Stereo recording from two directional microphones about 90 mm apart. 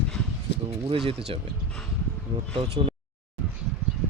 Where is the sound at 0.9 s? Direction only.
90° right.